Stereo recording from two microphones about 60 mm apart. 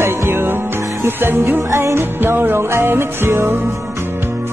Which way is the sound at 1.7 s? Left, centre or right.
Right.